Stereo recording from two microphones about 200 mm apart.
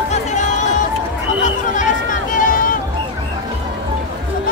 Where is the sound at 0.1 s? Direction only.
35° left (ahead or behind).